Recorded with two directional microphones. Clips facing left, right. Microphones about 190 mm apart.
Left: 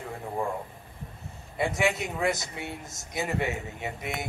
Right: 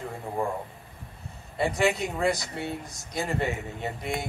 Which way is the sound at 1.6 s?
Centre (ahead or behind).